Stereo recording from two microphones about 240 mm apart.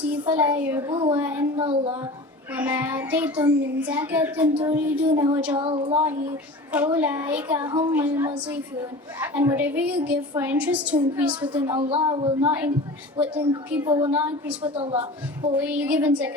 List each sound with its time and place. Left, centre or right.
0.3 s a woman's voice: centre
2.6 s a woman's voice: centre
14.6 s a woman's voice: right
15.5 s a woman's voice: centre